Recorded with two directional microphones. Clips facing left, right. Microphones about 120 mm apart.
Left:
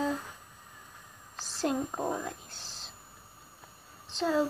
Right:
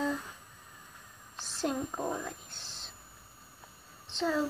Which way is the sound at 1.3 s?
35° left (ahead or behind).